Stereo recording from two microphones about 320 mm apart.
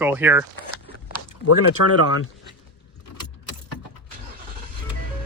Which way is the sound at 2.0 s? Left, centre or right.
Left.